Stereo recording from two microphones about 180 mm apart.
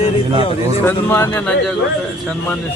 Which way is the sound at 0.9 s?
10° left (ahead or behind).